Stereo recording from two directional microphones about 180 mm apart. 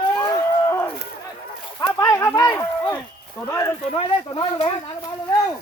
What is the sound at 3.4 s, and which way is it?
Speech, 15° left (ahead or behind).